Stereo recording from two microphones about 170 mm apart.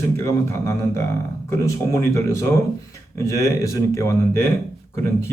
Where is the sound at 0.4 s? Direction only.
15° left (ahead or behind).